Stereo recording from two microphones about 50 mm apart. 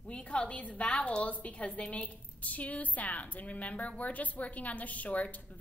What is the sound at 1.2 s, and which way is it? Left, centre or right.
A woman's voice, left.